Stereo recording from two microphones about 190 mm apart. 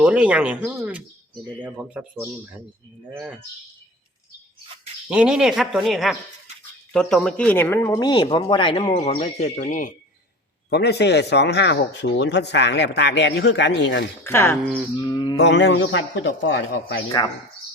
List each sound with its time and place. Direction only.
0.0 s speech: 5° right (ahead or behind)
5.0 s speech: 5° right (ahead or behind); by 9.9 s 40° left (ahead or behind)
10.7 s speech: 60° left (ahead or behind)
14.3 s speech: 15° left (ahead or behind)
14.9 s speech: 25° left (ahead or behind)
15.4 s a man's voice: 70° left (ahead or behind)
17.2 s speech: 25° left (ahead or behind)